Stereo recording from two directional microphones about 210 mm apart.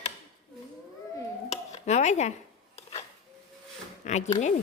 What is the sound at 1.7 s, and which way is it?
Speech, 35° left (ahead or behind).